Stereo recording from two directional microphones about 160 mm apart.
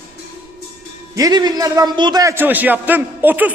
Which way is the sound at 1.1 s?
25° right (ahead or behind).